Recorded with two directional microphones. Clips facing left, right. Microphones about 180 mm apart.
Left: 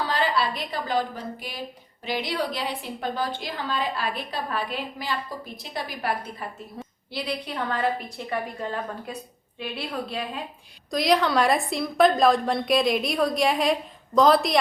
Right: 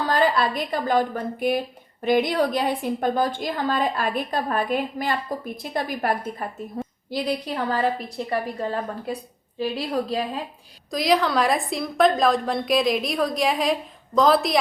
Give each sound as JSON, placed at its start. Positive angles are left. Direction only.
{"t": 0.1, "sound": "a woman's voice", "side_deg": -50}
{"t": 6.8, "sound": "a sound", "side_deg": -45}
{"t": 7.1, "sound": "a woman's voice", "side_deg": -40}
{"t": 10.9, "sound": "a woman's voice", "side_deg": 0}